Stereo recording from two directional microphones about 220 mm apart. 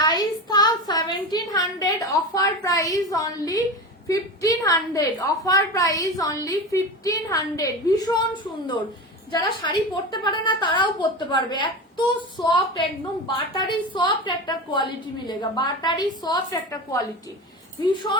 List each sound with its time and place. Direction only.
0.0 s a sound: 20° left (ahead or behind)
4.1 s a woman's voice: 15° left (ahead or behind)
9.3 s a woman's voice: 20° left (ahead or behind)